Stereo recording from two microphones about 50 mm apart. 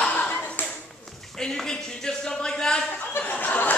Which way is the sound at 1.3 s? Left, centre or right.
Centre.